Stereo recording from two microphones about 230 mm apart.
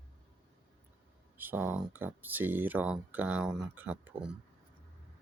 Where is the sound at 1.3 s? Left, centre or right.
Centre.